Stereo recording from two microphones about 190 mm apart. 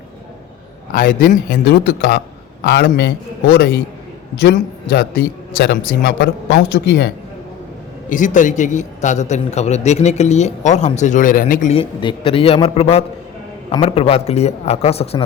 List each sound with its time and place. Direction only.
0.9 s a man's voice: 45° left (ahead or behind); by 7.1 s 65° left (ahead or behind)
8.1 s a man's voice: 40° left (ahead or behind)
11.7 s a man's voice: 30° left (ahead or behind)